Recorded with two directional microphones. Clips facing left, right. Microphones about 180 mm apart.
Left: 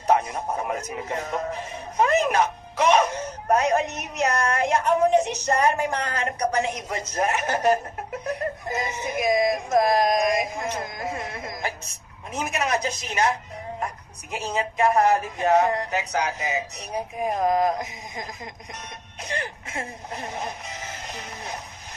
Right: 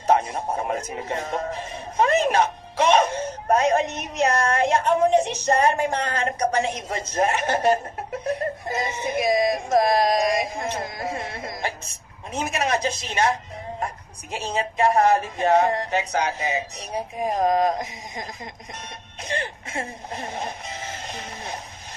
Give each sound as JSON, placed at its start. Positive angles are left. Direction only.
{"t": 0.0, "sound": "music", "side_deg": -30}
{"t": 8.3, "sound": "speech", "side_deg": -30}
{"t": 19.3, "sound": "music", "side_deg": -30}